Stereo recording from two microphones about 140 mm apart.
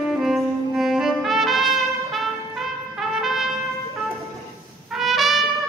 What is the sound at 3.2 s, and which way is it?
Trumpet, centre (ahead or behind).